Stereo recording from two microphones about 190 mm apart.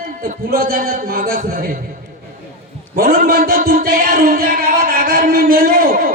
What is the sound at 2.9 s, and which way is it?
Music, 50° right (ahead or behind).